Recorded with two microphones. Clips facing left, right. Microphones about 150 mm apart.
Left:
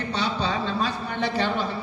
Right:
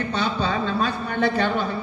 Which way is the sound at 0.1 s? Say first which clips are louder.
Even; 50° right (ahead or behind).